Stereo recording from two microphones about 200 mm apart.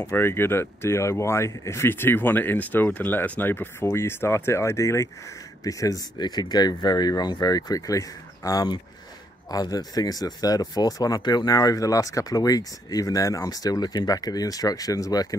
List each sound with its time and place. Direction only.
0.0 s speech: 10° left (ahead or behind)